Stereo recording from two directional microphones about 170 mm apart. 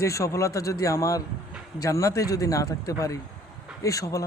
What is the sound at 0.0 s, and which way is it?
Speech, 20° left (ahead or behind).